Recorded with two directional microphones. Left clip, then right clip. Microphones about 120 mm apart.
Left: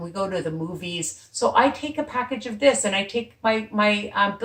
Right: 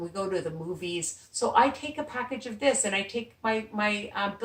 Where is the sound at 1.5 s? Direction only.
25° right (ahead or behind).